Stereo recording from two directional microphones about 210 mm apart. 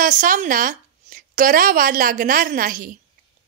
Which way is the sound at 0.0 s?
40° right (ahead or behind).